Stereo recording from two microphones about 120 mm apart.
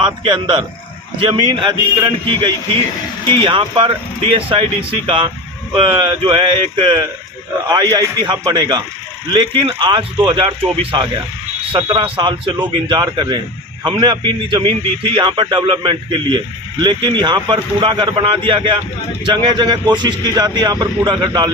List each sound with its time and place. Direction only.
0.0 s a man's voice: 40° right (ahead or behind)